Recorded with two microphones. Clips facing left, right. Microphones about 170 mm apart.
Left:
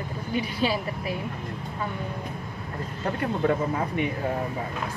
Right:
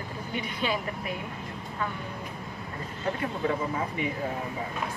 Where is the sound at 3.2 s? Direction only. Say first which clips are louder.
Left 6 dB; 50° left (ahead or behind).